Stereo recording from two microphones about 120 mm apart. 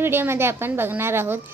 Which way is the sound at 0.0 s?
20° right (ahead or behind).